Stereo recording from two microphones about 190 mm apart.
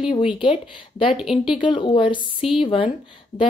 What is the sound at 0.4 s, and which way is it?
Speech, 25° left (ahead or behind).